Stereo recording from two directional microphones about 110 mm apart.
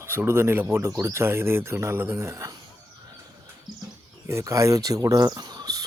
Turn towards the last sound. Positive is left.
turn(degrees=-35)  # may be behind; listen again after turning